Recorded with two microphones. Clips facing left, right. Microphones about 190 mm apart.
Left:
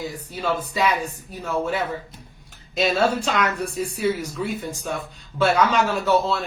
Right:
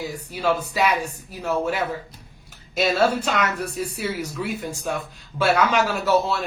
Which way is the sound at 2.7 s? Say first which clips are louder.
Even; 5° right (ahead or behind).